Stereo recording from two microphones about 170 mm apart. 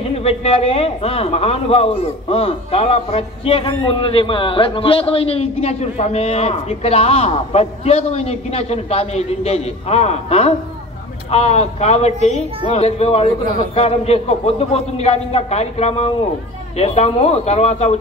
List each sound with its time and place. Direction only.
0.2 s a man's voice: 35° left (ahead or behind)